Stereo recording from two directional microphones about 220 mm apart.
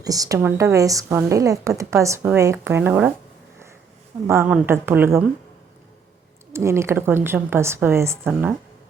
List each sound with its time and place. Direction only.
0.0 s a woman's voice: 15° right (ahead or behind)
4.3 s a woman's voice: 10° right (ahead or behind)
6.5 s a woman's voice: 10° right (ahead or behind)